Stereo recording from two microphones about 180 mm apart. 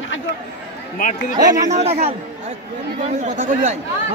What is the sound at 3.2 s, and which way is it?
Speech, 40° right (ahead or behind).